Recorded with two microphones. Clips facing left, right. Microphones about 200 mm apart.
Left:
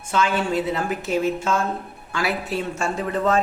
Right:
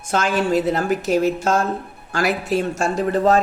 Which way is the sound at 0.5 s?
40° right (ahead or behind).